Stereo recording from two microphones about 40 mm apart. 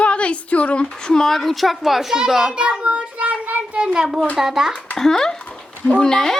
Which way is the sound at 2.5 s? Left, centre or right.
Right.